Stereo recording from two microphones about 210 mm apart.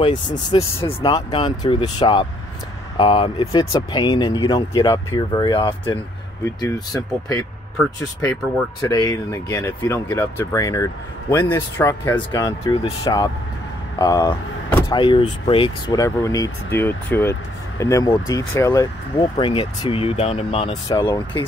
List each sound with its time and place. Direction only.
0.0 s speech: 20° left (ahead or behind)
8.8 s speech: 20° left (ahead or behind)